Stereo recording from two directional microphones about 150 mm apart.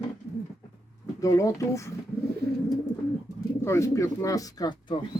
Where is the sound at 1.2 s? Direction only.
20° left (ahead or behind).